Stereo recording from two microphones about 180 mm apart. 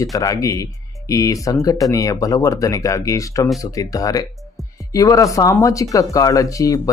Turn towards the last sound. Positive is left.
turn(degrees=20)  # may be behind; listen again after turning